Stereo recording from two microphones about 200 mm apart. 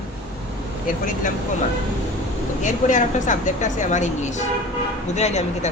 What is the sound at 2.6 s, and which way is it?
A woman's voice, 40° left (ahead or behind).